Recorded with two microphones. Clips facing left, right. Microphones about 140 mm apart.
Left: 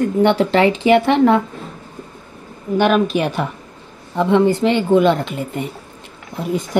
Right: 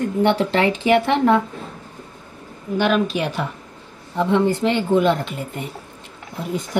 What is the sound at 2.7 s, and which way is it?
Speech, 50° left (ahead or behind).